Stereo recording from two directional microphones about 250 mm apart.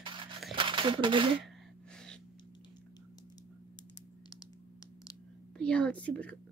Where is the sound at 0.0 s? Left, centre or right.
Centre.